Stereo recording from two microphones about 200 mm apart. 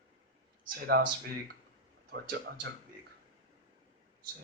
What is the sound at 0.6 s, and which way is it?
Speech, 45° right (ahead or behind).